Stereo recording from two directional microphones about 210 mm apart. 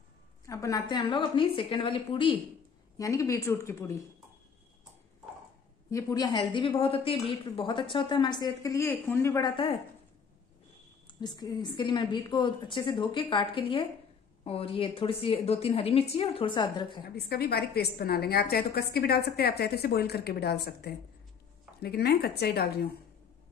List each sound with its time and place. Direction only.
0.5 s a woman's voice: 15° left (ahead or behind)
5.9 s a woman's voice: 15° left (ahead or behind)
11.1 s a woman's voice: 20° left (ahead or behind)
17.0 s a woman's voice: 50° left (ahead or behind)